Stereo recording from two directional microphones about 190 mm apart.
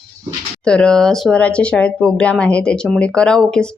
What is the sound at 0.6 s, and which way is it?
Speech, 5° left (ahead or behind).